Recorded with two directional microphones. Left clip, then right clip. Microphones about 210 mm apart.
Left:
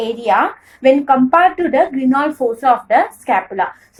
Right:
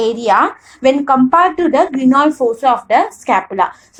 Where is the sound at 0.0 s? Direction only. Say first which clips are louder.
Right 3 dB; 30° right (ahead or behind).